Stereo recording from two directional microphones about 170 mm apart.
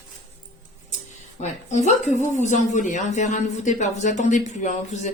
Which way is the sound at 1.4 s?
45° left (ahead or behind).